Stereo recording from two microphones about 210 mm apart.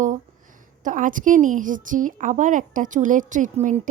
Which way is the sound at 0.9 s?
40° right (ahead or behind).